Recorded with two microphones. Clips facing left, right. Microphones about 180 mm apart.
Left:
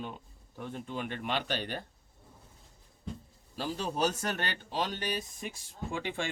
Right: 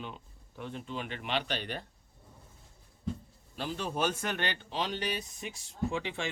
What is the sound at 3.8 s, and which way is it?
A man's voice, 40° left (ahead or behind).